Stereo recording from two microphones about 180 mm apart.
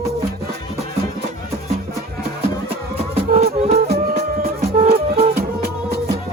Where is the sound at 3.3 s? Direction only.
35° right (ahead or behind).